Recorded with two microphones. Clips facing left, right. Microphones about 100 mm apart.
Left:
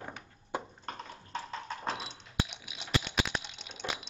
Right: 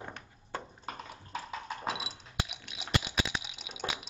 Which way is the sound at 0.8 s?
5° right (ahead or behind).